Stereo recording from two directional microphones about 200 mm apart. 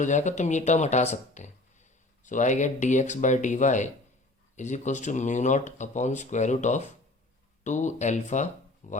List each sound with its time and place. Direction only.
0.0 s speech: 35° left (ahead or behind)